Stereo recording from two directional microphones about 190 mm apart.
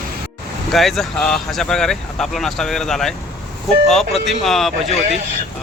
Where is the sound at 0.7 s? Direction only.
Centre (ahead or behind).